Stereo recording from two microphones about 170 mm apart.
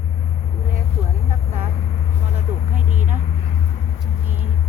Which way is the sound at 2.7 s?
45° right (ahead or behind).